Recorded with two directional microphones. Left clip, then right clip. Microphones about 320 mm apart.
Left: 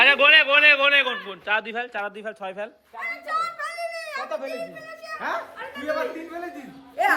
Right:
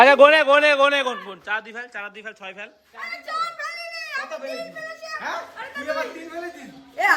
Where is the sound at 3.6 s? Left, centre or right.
Left.